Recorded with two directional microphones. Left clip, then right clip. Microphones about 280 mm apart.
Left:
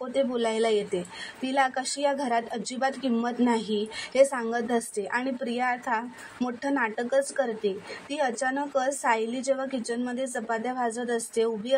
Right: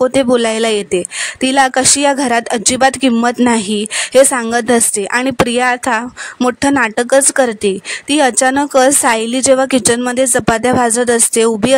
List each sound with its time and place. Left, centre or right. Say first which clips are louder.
0.1 s speech: right 14 dB; right